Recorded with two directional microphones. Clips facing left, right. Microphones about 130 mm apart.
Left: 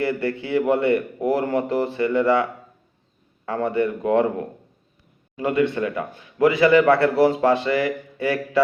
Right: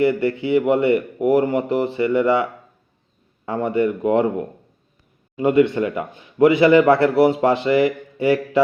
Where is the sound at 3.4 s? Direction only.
15° right (ahead or behind).